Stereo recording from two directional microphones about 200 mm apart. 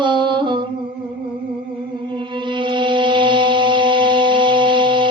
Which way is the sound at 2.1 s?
25° right (ahead or behind).